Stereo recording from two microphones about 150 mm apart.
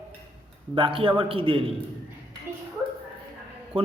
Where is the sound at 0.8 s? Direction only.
35° right (ahead or behind).